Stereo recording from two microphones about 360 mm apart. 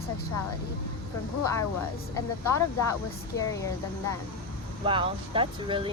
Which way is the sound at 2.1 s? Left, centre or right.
Centre.